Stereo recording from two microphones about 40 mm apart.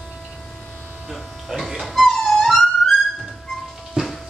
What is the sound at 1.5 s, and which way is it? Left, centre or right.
Speech, centre.